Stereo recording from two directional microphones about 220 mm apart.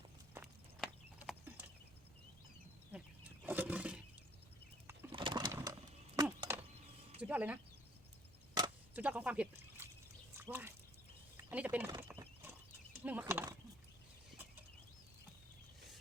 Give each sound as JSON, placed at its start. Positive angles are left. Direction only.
{"t": 0.3, "sound": "clip-clop", "side_deg": -5}
{"t": 2.9, "sound": "roaring cats", "side_deg": -5}
{"t": 5.1, "sound": "a sound", "side_deg": -20}
{"t": 6.2, "sound": "chop", "side_deg": -20}
{"t": 7.2, "sound": "speech", "side_deg": -5}
{"t": 9.0, "sound": "speech", "side_deg": -5}
{"t": 10.3, "sound": "a sound", "side_deg": -10}
{"t": 13.0, "sound": "horse", "side_deg": -10}